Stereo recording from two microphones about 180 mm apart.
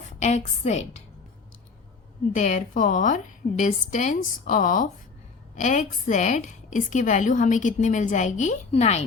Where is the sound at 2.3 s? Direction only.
45° left (ahead or behind).